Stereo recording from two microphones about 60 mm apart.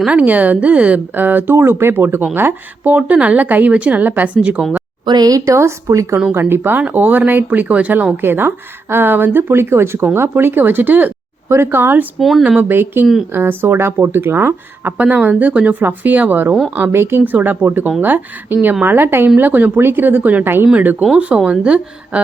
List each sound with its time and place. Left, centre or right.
0.1 s speech: right
5.2 s speech: right
5.5 s a woman's voice: right
6.5 s speech: right
8.1 s speech: right
11.4 s speech: right
14.9 s speech: right
21.2 s speech: right